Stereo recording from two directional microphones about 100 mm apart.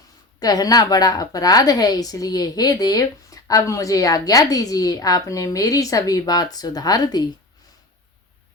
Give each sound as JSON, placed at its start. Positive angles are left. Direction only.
{"t": 0.3, "sound": "a woman's voice", "side_deg": 40}